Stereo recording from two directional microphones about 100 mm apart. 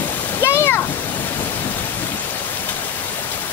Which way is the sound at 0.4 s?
25° left (ahead or behind).